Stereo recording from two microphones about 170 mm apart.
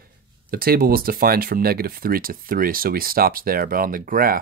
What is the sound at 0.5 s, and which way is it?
Speech, 60° right (ahead or behind).